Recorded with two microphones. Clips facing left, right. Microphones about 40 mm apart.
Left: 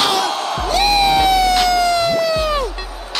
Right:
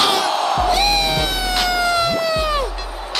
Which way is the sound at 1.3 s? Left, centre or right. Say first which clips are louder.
Left 6 dB; centre.